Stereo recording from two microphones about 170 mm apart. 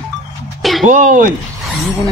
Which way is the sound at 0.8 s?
50° right (ahead or behind).